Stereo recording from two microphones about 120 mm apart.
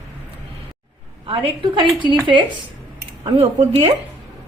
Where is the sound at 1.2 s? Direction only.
45° right (ahead or behind).